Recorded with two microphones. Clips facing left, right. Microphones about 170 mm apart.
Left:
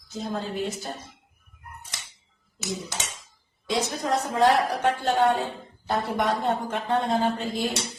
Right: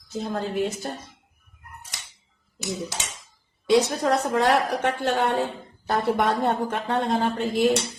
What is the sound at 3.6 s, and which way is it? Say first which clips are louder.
A woman's voice: right 7 dB; 70° right (ahead or behind).